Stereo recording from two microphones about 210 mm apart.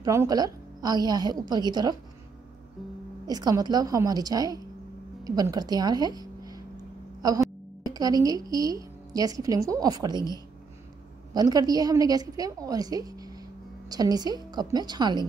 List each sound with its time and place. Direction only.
0.0 s a woman's voice: 15° right (ahead or behind)
3.3 s a woman's voice: 20° right (ahead or behind)
11.3 s a woman's voice: 20° right (ahead or behind)